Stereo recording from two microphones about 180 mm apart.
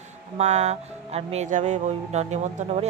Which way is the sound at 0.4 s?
40° right (ahead or behind).